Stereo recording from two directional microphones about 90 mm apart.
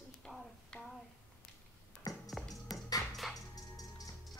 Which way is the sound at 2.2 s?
Centre (ahead or behind).